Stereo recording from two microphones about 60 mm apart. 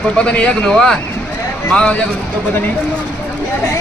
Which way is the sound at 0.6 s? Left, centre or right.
Centre.